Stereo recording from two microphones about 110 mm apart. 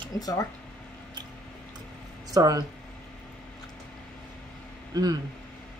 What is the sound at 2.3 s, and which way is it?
Speech, 35° right (ahead or behind).